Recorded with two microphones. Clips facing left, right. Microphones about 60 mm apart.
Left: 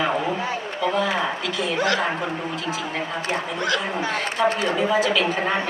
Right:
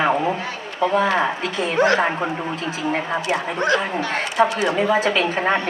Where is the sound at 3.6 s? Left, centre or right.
Right.